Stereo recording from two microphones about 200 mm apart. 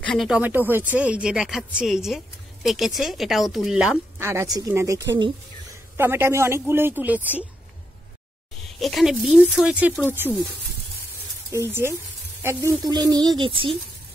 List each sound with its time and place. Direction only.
0.0 s speech: centre (ahead or behind)
8.7 s speech: centre (ahead or behind)
11.5 s speech: 10° right (ahead or behind)